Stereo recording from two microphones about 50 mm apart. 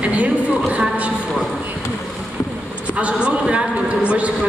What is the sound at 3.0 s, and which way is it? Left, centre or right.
Speech, right.